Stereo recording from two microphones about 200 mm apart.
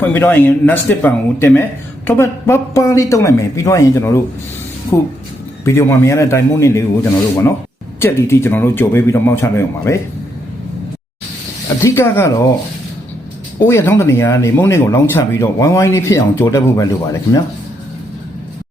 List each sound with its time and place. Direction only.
0.0 s speech: 10° left (ahead or behind)
5.6 s speech: 10° left (ahead or behind)
11.8 s speech: 15° left (ahead or behind)
13.6 s speech: 15° left (ahead or behind)